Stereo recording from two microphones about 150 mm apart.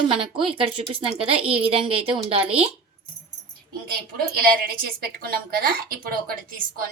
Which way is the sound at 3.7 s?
85° right.